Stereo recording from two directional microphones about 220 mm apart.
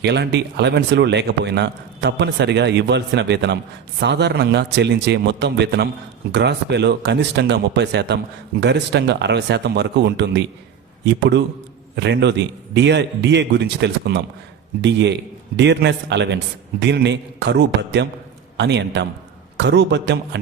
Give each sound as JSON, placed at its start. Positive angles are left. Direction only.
{"t": 0.0, "sound": "a man's voice", "side_deg": -50}